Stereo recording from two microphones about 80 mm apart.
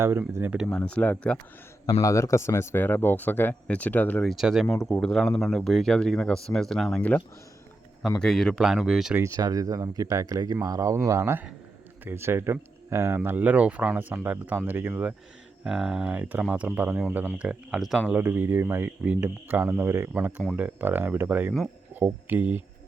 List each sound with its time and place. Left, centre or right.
0.0 s speech: right
0.8 s speech: centre
1.9 s speech: left
4.2 s speech: centre
8.2 s speech: centre
8.6 s speech: centre
9.3 s speech: right
15.6 s speech: centre
16.1 s speech: centre
17.3 s speech: centre
18.2 s speech: right
18.9 s speech: centre